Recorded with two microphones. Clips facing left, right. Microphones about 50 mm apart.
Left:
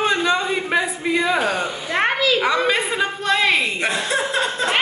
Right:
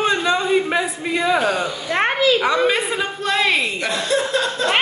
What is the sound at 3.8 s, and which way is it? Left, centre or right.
Chuckle, left.